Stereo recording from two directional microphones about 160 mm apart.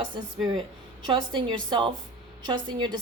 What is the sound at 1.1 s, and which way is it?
A woman's voice, 30° right (ahead or behind).